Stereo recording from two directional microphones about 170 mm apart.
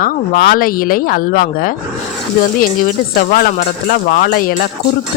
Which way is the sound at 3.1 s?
55° left (ahead or behind).